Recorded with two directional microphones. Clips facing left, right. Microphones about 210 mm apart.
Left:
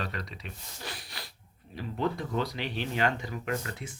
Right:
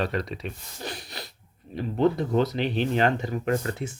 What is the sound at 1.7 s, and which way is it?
Speech, 25° right (ahead or behind).